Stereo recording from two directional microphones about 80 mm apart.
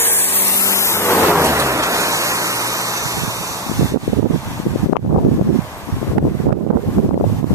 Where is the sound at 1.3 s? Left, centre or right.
Right.